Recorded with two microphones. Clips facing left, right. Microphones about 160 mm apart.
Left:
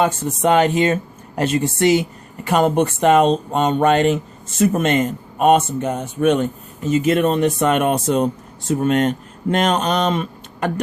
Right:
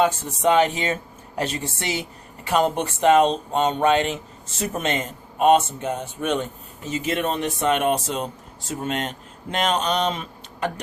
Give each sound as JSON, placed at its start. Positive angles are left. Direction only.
{"t": 0.0, "sound": "speech", "side_deg": 55}